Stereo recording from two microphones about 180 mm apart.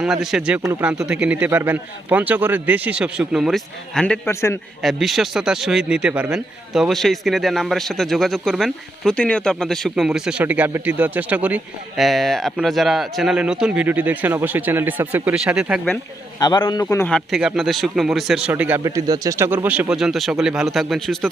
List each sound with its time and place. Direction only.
0.0 s a man's voice: centre (ahead or behind); by 4.5 s 15° left (ahead or behind)
4.8 s a man's voice: centre (ahead or behind)
16.4 s a man's voice: 25° left (ahead or behind)
17.1 s a man's voice: centre (ahead or behind)